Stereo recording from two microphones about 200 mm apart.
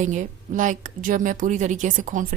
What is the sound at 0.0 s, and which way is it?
A woman's voice, 40° right (ahead or behind).